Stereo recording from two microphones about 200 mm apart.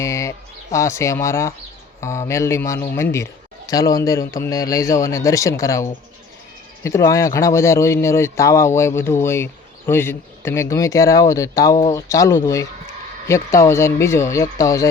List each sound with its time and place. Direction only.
0.0 s speech: 15° left (ahead or behind)